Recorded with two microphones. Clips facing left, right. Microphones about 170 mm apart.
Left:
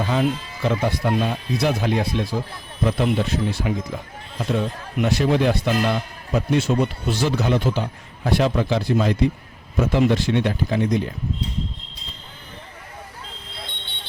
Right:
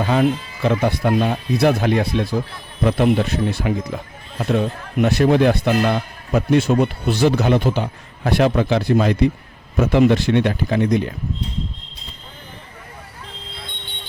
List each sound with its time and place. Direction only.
0.0 s speech: 65° right (ahead or behind)